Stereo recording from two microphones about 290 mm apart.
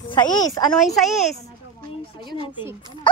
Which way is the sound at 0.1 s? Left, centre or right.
Centre.